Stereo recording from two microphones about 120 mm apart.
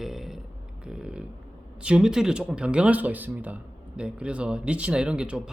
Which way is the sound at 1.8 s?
10° right (ahead or behind).